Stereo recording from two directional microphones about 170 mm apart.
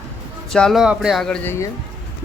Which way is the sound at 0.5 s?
Centre (ahead or behind).